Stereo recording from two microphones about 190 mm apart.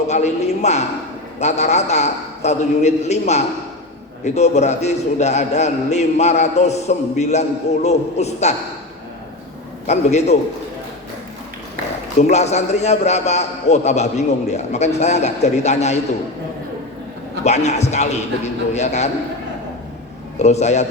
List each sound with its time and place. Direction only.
0.1 s a man's voice: 35° left (ahead or behind)
9.8 s a man's voice: 35° left (ahead or behind)
12.3 s a man's voice: 35° left (ahead or behind)
17.4 s a man's voice: 35° left (ahead or behind)
20.4 s a man's voice: 35° left (ahead or behind)